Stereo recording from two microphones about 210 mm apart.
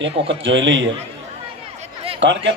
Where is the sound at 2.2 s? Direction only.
60° right (ahead or behind).